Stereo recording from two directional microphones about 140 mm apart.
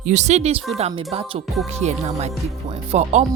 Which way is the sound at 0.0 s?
55° right (ahead or behind).